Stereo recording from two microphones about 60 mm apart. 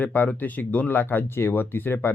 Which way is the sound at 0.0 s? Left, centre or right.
Left.